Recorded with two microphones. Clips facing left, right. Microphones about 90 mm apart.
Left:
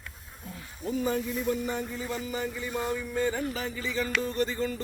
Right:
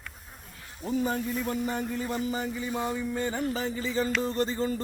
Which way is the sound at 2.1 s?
25° right (ahead or behind).